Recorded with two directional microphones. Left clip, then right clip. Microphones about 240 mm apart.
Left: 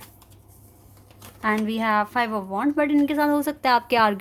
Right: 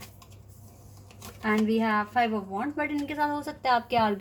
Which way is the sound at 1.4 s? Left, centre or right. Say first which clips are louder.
Left 3 dB; left.